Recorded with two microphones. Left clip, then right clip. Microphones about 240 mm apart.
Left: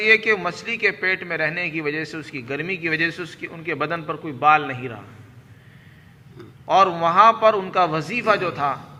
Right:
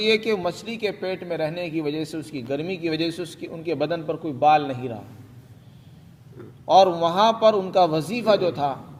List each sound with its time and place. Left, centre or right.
0.0 s a man's voice: centre
6.7 s a man's voice: right